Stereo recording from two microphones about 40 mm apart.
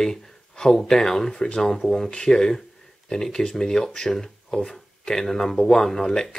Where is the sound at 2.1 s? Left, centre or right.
Left.